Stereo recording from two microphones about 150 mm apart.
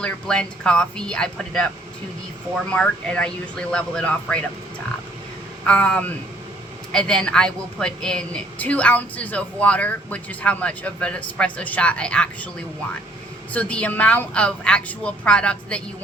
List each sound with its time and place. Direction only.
0.0 s a woman's voice: 5° left (ahead or behind)
5.6 s a woman's voice: 5° left (ahead or behind)
13.5 s a woman's voice: 10° left (ahead or behind)